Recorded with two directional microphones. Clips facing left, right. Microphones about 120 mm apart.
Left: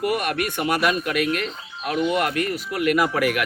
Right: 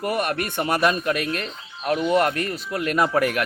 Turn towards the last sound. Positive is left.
turn(degrees=-30)  # may be behind; listen again after turning